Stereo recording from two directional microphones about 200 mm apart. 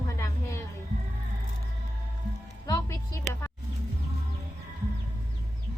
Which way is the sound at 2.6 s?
15° left (ahead or behind).